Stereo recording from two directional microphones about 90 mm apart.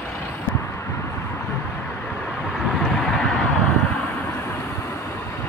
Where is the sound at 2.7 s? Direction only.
5° left (ahead or behind).